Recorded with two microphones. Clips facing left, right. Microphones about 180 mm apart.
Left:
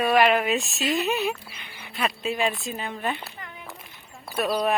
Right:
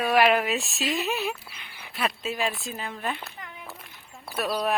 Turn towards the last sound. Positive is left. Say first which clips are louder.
# left 3 dB
turn(degrees=0)  # may be behind; listen again after turning